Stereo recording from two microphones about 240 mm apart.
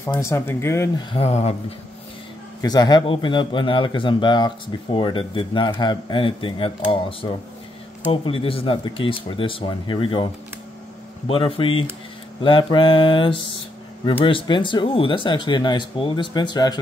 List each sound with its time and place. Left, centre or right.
0.0 s speech: centre
1.1 s speech: left
2.6 s speech: centre